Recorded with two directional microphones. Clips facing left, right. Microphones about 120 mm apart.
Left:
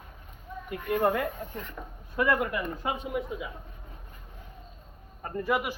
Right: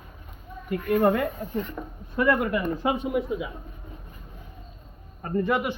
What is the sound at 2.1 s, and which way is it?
Speech, 5° left (ahead or behind).